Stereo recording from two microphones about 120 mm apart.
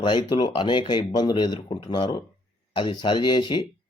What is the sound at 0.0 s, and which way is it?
A man's voice, 40° left (ahead or behind).